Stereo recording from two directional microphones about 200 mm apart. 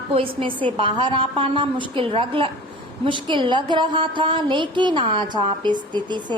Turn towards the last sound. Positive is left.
turn(degrees=-20)  # may be behind; listen again after turning